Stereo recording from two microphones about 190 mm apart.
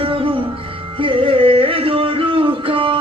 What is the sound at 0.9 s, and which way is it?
Music, 25° right (ahead or behind).